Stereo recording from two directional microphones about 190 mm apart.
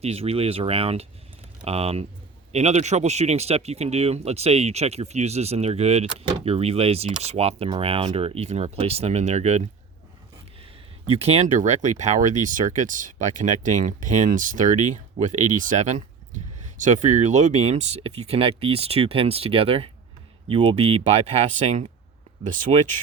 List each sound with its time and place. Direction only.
0.0 s speech: 30° right (ahead or behind)
11.1 s speech: 35° right (ahead or behind)